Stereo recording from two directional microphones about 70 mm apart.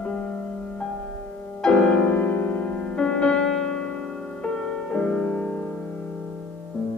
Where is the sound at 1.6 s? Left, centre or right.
Centre.